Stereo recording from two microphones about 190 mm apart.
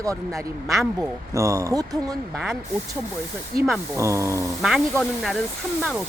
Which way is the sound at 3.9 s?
15° right (ahead or behind).